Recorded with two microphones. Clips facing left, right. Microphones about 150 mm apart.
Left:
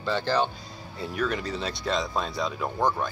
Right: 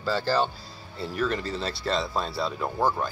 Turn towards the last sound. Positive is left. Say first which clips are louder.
# even
turn(degrees=-5)  # may be behind; listen again after turning